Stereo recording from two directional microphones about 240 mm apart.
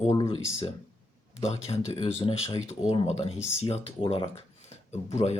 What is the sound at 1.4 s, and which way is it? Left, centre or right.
Speech, left.